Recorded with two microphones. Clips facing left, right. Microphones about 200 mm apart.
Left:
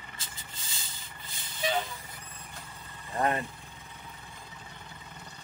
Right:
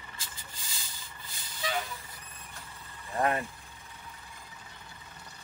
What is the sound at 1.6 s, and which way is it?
Vehicle, 25° left (ahead or behind).